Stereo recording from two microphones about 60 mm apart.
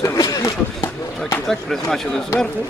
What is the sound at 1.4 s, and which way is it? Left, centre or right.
Speech, centre.